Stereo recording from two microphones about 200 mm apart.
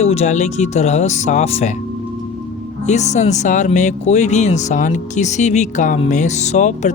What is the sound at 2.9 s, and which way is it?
Speech, 35° left (ahead or behind).